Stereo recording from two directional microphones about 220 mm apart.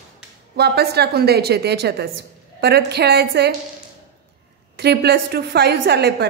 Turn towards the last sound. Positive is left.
turn(degrees=-50)  # may be behind; listen again after turning